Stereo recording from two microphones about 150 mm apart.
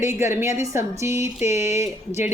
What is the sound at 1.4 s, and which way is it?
Speech, 50° left (ahead or behind).